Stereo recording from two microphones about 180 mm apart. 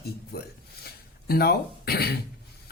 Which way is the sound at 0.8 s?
60° left (ahead or behind).